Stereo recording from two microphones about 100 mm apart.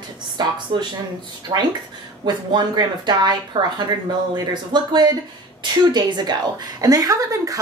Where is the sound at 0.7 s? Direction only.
50° right (ahead or behind).